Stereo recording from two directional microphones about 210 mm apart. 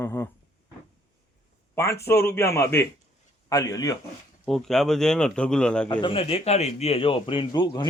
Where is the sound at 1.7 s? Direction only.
15° left (ahead or behind).